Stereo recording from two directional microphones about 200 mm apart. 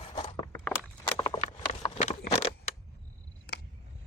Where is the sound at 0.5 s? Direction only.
10° left (ahead or behind); by 2.5 s 30° left (ahead or behind).